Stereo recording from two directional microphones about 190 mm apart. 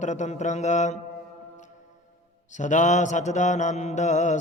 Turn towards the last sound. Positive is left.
turn(degrees=40)  # may be behind; listen again after turning